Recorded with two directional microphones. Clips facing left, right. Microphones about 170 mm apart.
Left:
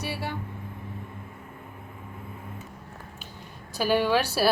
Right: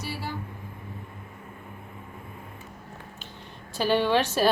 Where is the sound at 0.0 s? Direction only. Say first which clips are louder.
Left 2 dB; 65° left (ahead or behind).